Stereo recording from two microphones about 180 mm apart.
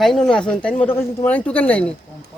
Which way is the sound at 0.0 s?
Centre (ahead or behind).